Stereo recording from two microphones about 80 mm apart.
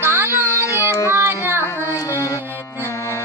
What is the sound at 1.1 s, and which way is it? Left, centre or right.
Carnatic music, right.